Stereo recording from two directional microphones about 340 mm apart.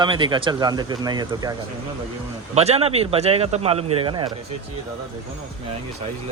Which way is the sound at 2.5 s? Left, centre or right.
Centre.